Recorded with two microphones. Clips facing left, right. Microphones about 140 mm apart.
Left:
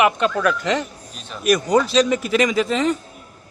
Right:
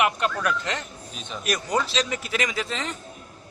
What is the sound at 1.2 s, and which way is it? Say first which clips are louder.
Speech: even; centre (ahead or behind).